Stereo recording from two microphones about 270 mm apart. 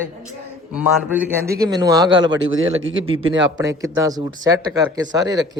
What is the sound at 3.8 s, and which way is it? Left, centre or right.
A man's voice, centre.